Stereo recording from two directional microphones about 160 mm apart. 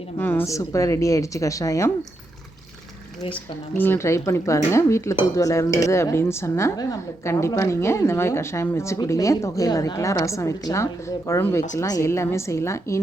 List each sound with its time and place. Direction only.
0.2 s a woman's voice: 15° left (ahead or behind)
3.8 s dishes: 15° left (ahead or behind)
7.3 s a woman's voice: 15° left (ahead or behind)
11.3 s dishes: 15° left (ahead or behind)